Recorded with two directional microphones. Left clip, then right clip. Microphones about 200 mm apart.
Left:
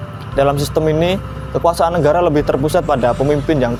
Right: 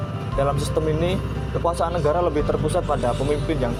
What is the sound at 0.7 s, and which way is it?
Speech, 45° left (ahead or behind).